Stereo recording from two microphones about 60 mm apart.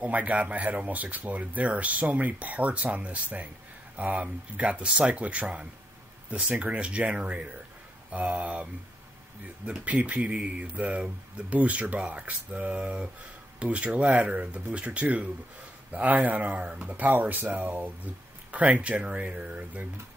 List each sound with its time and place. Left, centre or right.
0.0 s speech: right
9.8 s speech: right